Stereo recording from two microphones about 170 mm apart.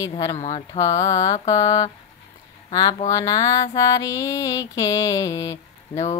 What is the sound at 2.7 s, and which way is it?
Speech, 25° left (ahead or behind).